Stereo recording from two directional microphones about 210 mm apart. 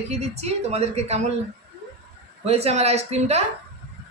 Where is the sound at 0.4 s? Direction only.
30° right (ahead or behind).